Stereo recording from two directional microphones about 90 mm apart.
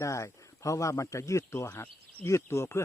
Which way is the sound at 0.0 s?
35° left (ahead or behind).